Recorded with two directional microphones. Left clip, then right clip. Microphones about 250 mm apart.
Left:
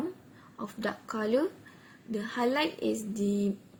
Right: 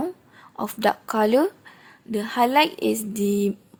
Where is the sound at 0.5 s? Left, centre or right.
Right.